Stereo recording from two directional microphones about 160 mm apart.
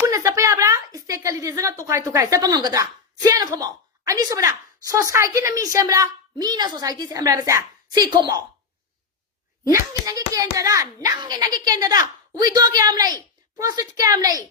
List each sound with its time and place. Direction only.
0.0 s a sound: 20° right (ahead or behind)
2.1 s a woman's voice: 20° right (ahead or behind)
9.7 s a woman's voice: 20° right (ahead or behind)